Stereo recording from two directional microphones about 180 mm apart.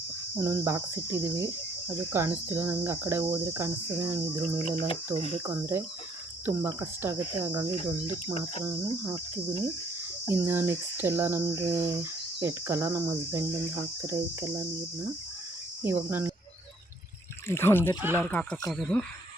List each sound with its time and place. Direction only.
0.3 s cricket: 15° right (ahead or behind)
10.3 s cricket: 15° right (ahead or behind)
15.8 s cricket: 10° right (ahead or behind)
17.5 s speech: 15° left (ahead or behind)
18.0 s cricket: 10° right (ahead or behind)
18.3 s speech: 10° left (ahead or behind)